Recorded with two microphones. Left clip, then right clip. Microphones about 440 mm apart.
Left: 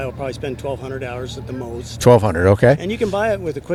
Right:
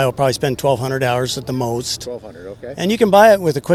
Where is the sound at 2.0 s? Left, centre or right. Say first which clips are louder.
Left 17 dB; left.